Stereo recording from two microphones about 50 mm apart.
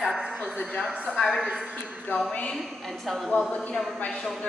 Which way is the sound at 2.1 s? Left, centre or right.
Left.